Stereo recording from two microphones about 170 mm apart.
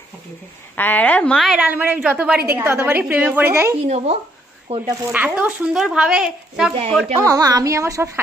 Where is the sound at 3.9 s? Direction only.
35° right (ahead or behind).